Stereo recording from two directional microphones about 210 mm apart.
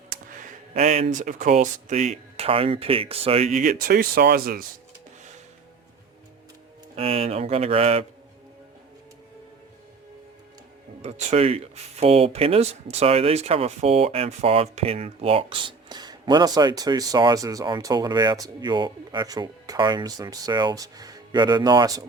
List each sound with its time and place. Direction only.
0.1 s a sound: 40° right (ahead or behind)
1.1 s speech: 35° right (ahead or behind)
3.6 s speech: 40° right (ahead or behind)
6.9 s speech: 30° right (ahead or behind)
11.0 s speech: 30° right (ahead or behind)